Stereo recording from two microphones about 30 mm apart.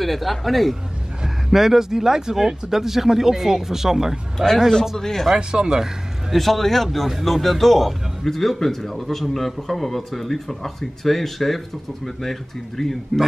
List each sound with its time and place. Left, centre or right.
0.0 s speech: centre
1.2 s speech: centre
4.9 s speech: centre
5.5 s speech: right
6.3 s speech: centre